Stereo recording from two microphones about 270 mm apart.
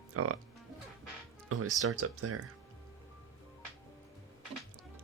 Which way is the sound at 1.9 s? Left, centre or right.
Right.